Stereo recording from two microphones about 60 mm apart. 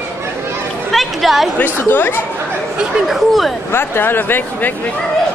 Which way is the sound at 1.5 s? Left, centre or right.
Left.